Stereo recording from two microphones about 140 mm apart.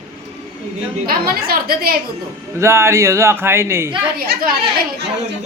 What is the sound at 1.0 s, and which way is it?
Speech, 90° right.